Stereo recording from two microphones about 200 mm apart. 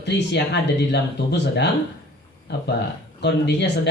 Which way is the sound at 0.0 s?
60° left (ahead or behind).